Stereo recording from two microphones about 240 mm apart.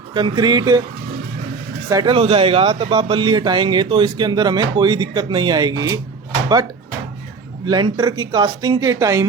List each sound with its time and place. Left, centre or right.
0.1 s a man's voice: centre
1.9 s a man's voice: centre
7.7 s a man's voice: centre